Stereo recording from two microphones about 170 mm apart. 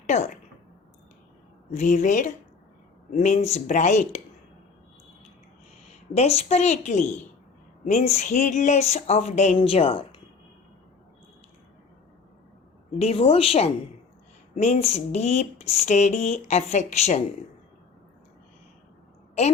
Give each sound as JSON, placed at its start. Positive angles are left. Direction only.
{"t": 0.1, "sound": "speech", "side_deg": 40}
{"t": 1.7, "sound": "speech", "side_deg": 45}
{"t": 5.9, "sound": "speech", "side_deg": 40}
{"t": 13.0, "sound": "speech", "side_deg": 35}
{"t": 19.4, "sound": "speech", "side_deg": 40}